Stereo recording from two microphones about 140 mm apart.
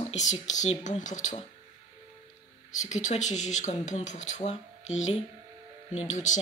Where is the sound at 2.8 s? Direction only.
60° left (ahead or behind).